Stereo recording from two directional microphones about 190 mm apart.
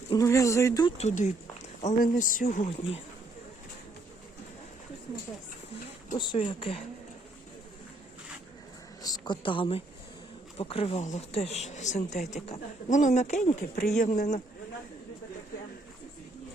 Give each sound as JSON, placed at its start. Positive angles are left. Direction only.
{"t": 0.1, "sound": "speech", "side_deg": 15}
{"t": 0.9, "sound": "speech", "side_deg": 40}
{"t": 6.1, "sound": "speech", "side_deg": 25}
{"t": 9.0, "sound": "a woman's voice", "side_deg": 20}